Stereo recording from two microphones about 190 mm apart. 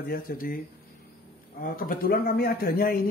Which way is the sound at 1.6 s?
50° left (ahead or behind).